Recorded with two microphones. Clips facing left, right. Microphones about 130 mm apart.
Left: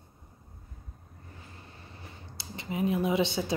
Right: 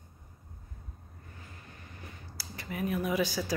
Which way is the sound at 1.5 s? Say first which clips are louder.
Left 1 dB; 30° left (ahead or behind).